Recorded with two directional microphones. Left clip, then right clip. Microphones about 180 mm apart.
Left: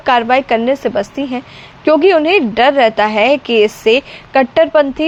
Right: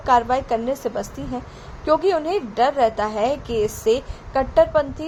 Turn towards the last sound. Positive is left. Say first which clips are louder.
# left 7 dB
turn(degrees=30)  # may be behind; listen again after turning